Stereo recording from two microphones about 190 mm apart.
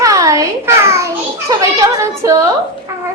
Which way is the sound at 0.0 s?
20° right (ahead or behind).